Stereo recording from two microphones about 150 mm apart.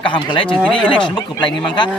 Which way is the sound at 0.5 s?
5° left (ahead or behind).